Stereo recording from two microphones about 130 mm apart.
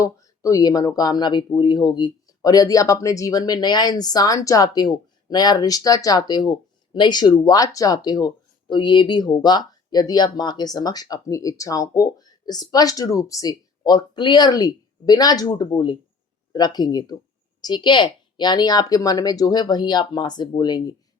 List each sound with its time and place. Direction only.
0.0 s speech: 25° left (ahead or behind)